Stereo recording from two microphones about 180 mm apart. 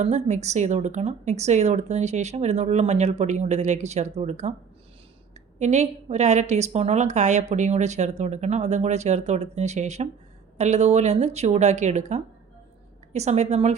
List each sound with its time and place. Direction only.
0.0 s a woman's voice: 40° right (ahead or behind)